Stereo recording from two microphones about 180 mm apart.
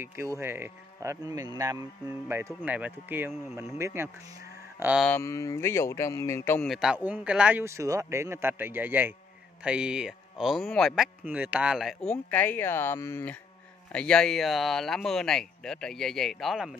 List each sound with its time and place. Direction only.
0.0 s speech: 15° right (ahead or behind)
5.0 s speech: 15° left (ahead or behind)
6.7 s speech: 5° right (ahead or behind)